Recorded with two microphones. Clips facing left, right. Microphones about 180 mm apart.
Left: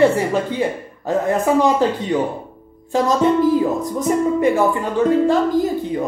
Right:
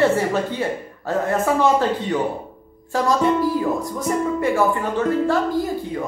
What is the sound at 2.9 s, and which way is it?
A man's voice, 20° left (ahead or behind).